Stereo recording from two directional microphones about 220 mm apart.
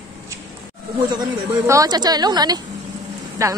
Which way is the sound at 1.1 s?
15° right (ahead or behind).